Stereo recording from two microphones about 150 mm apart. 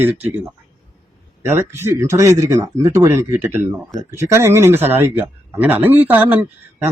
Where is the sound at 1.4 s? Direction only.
15° right (ahead or behind).